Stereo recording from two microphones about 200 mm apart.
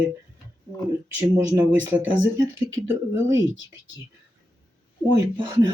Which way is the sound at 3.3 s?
70° left (ahead or behind).